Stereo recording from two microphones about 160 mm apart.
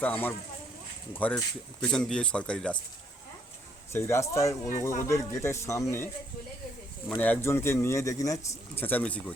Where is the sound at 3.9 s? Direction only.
15° left (ahead or behind).